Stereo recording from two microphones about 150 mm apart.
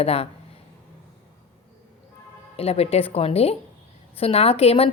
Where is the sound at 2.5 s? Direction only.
40° left (ahead or behind).